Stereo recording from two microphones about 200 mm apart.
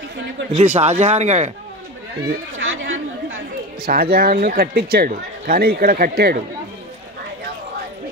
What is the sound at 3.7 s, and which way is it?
Speech, 50° right (ahead or behind).